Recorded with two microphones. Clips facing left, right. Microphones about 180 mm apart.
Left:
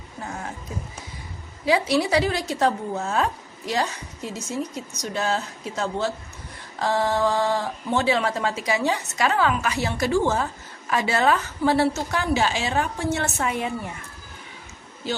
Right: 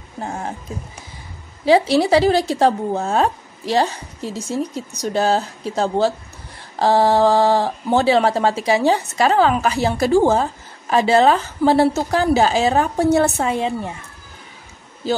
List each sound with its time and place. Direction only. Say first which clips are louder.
0.2 s speech: right 6 dB; 30° right (ahead or behind)
1.7 s speech: right 7 dB; 30° right (ahead or behind)